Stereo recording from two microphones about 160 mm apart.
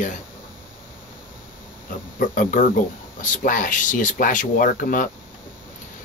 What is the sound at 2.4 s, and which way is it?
Speech, 55° left (ahead or behind).